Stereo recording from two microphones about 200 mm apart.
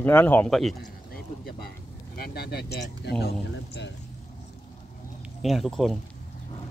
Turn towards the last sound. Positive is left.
turn(degrees=0)  # may be behind; listen again after turning